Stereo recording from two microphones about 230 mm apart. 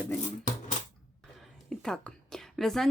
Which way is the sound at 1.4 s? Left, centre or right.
Centre.